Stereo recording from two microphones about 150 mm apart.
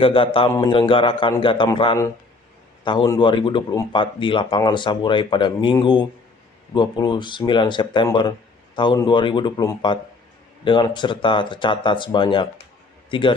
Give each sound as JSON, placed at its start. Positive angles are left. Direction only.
{"t": 0.0, "sound": "a man's voice", "side_deg": 35}